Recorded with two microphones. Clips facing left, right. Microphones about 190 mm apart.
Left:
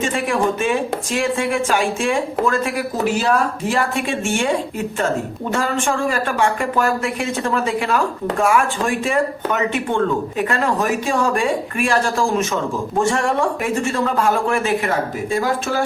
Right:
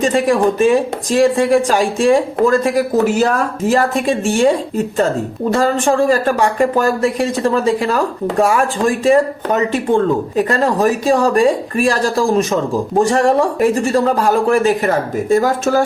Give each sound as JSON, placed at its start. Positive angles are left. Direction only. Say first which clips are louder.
{"t": 0.0, "sound": "speech", "louder": "right 6 dB", "side_deg": -35}